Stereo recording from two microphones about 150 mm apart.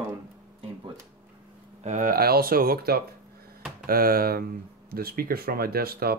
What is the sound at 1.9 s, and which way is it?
Speech, 60° right (ahead or behind).